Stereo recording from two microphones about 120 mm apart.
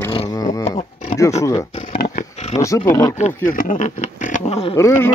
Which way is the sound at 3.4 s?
90° left.